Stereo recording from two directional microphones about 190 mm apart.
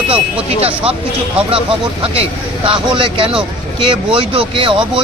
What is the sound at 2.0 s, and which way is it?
Speech, 30° right (ahead or behind).